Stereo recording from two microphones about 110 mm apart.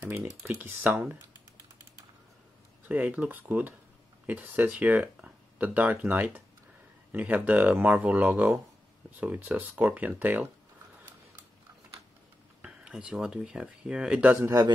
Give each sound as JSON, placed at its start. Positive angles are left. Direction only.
{"t": 0.0, "sound": "speech", "side_deg": -15}
{"t": 2.9, "sound": "speech", "side_deg": -15}
{"t": 12.6, "sound": "speech", "side_deg": -10}
{"t": 14.3, "sound": "a man's voice", "side_deg": -20}